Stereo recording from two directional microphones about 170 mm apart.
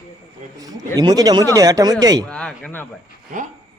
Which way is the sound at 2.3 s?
5° left (ahead or behind).